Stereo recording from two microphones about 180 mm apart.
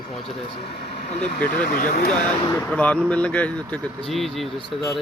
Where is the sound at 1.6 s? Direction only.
50° left (ahead or behind).